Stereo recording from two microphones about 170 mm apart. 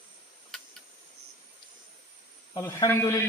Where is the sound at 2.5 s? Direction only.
20° left (ahead or behind).